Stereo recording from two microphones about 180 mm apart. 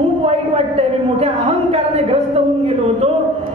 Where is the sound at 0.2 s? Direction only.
35° right (ahead or behind).